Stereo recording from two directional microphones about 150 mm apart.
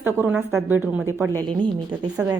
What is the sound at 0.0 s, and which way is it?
A woman's voice, 10° right (ahead or behind).